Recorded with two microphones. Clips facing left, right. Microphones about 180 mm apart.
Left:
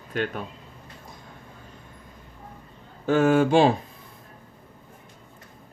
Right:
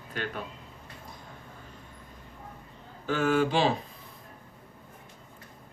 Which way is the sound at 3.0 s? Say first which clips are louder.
Left 6 dB; 50° left (ahead or behind).